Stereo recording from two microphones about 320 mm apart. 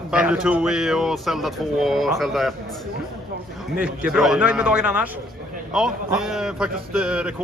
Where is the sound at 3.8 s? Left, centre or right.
Centre.